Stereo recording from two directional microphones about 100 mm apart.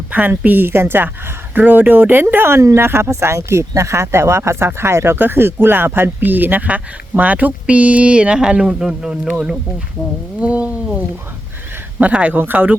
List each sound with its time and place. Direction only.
0.1 s speech: 15° right (ahead or behind)